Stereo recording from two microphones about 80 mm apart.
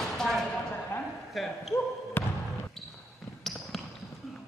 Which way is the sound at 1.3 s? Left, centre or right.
Centre.